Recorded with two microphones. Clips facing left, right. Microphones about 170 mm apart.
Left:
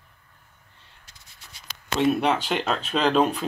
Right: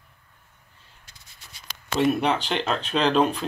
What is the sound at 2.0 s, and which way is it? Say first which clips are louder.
Speech: even; centre (ahead or behind).